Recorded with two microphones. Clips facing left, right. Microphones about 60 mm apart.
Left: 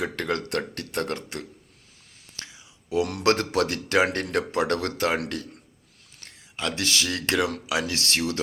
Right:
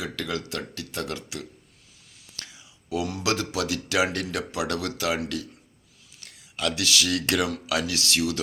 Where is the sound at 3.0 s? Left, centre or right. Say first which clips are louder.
Left 4 dB; left.